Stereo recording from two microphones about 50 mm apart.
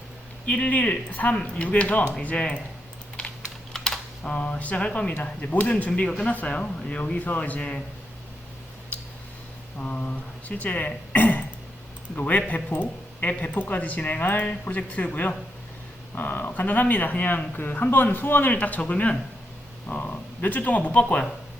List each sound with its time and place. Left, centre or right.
0.4 s speech: left
3.2 s typing: left
3.7 s typing: centre
4.2 s speech: left
9.7 s speech: left